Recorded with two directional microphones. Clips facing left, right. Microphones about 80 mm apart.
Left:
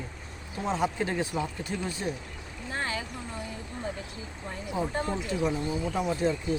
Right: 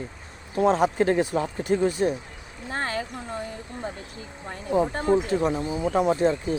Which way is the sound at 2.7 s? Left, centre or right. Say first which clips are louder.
Right 4 dB; right.